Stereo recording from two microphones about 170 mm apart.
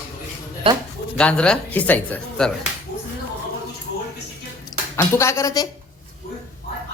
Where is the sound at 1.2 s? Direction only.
5° left (ahead or behind).